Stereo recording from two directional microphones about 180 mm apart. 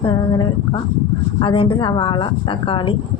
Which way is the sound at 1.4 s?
30° left (ahead or behind).